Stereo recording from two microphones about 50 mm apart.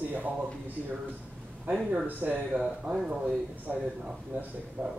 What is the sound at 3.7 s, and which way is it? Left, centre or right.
Speech, right.